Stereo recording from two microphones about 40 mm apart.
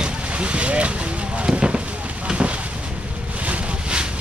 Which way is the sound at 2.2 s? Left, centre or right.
Right.